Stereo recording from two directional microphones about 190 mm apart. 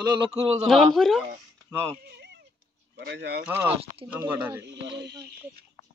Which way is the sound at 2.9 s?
65° right (ahead or behind).